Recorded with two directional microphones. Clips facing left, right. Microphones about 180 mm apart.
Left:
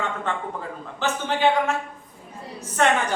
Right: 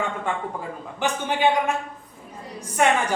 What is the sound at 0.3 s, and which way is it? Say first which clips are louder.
Speech: right 1 dB; 10° right (ahead or behind).